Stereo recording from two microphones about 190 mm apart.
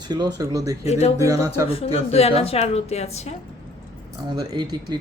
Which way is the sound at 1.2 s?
15° right (ahead or behind).